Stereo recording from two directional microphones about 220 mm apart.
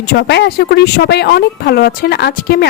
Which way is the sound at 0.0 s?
45° left (ahead or behind).